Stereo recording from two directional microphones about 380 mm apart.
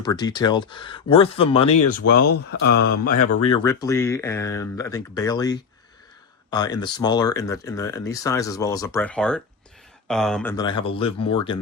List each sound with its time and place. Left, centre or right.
0.0 s speech: centre
2.2 s speech: left
2.6 s speech: left
3.0 s speech: left
3.3 s speech: centre